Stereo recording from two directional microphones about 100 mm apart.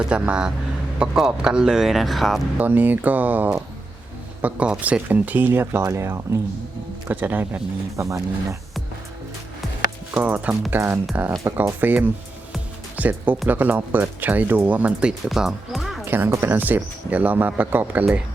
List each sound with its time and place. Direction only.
0.0 s speech: 10° right (ahead or behind)
2.6 s speech: 15° right (ahead or behind)
7.9 s speech: 30° right (ahead or behind)
10.2 s speech: 15° right (ahead or behind)
15.3 s music: centre (ahead or behind)
16.0 s speech: 20° right (ahead or behind)